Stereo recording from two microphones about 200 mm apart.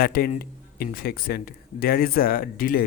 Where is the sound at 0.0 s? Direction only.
45° left (ahead or behind).